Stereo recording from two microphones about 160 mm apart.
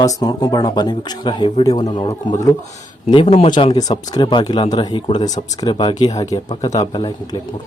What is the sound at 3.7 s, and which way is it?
Speech, 25° left (ahead or behind).